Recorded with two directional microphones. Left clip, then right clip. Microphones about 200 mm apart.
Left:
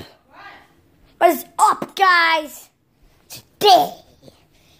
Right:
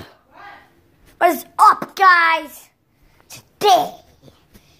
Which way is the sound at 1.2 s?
Centre (ahead or behind).